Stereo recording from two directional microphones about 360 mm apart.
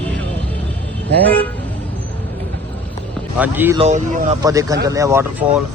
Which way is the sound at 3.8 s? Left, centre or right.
Centre.